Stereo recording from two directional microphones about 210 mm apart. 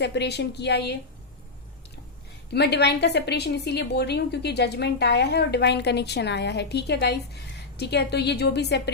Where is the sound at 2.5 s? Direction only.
50° left (ahead or behind).